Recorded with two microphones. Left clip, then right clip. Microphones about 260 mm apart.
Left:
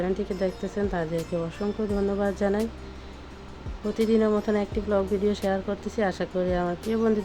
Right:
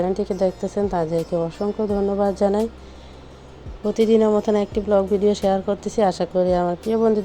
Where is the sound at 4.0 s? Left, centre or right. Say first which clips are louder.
Right 7 dB; right.